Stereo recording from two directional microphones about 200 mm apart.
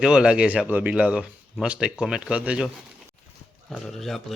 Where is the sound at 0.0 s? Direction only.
5° right (ahead or behind).